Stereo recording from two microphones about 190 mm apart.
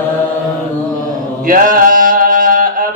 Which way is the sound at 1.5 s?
45° right (ahead or behind).